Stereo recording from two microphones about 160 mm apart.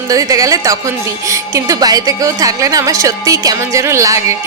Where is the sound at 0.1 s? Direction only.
20° right (ahead or behind).